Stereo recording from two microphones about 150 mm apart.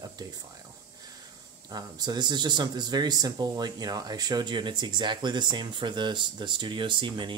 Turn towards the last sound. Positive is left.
turn(degrees=-30)  # may be behind; listen again after turning